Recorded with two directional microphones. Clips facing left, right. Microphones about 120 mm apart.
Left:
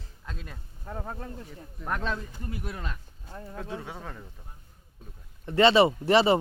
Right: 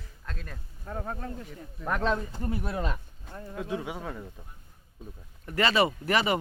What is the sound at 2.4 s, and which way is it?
Speech, 40° right (ahead or behind).